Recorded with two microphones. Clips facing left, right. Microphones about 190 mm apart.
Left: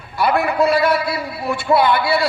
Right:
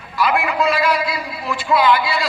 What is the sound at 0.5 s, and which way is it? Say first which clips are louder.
A man's voice: left 2 dB; 60° left (ahead or behind).